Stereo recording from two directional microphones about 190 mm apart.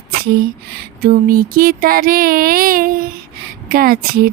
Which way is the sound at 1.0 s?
50° right (ahead or behind).